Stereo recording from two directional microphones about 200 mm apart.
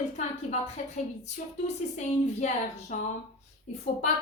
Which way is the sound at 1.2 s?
35° left (ahead or behind).